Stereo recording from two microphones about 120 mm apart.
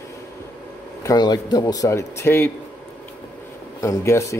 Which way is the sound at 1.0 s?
30° left (ahead or behind).